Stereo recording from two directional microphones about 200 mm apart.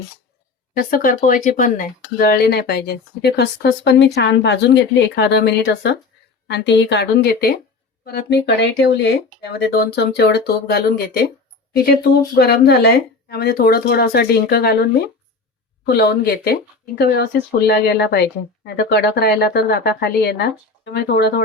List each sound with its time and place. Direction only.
0.8 s speech: 45° left (ahead or behind)
12.4 s speech: 55° left (ahead or behind)